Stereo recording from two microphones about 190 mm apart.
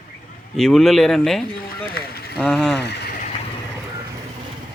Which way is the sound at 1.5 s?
50° left (ahead or behind).